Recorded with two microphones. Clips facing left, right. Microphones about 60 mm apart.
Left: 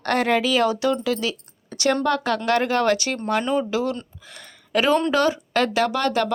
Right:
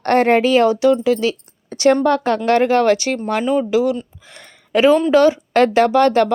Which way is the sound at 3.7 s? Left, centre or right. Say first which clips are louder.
Right 7 dB; centre.